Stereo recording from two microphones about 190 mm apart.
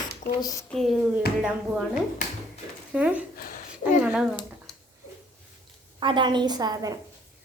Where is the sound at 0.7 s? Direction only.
Centre (ahead or behind).